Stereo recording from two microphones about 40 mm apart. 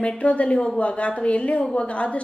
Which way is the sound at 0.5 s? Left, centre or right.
Centre.